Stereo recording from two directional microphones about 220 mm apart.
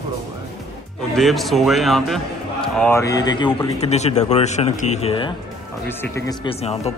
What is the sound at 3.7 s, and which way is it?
Speech, 30° left (ahead or behind).